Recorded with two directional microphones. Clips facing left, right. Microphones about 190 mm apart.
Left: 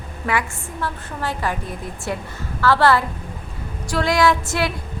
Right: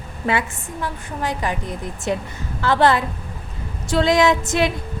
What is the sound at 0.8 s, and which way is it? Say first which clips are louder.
A woman's voice: right 1 dB; 15° right (ahead or behind).